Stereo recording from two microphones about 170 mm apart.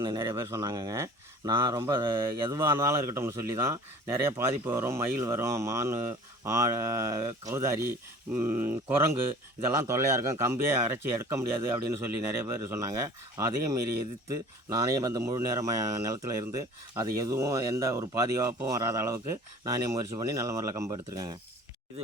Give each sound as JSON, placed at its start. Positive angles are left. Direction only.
{"t": 0.0, "sound": "speech", "side_deg": -20}